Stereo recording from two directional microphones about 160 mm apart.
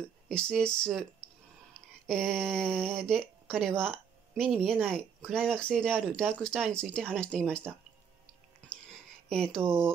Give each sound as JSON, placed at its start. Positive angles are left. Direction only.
{"t": 0.3, "sound": "speech", "side_deg": 5}
{"t": 2.0, "sound": "speech", "side_deg": 5}
{"t": 9.3, "sound": "speech", "side_deg": 5}